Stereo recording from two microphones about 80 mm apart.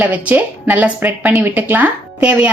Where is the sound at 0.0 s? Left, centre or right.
Centre.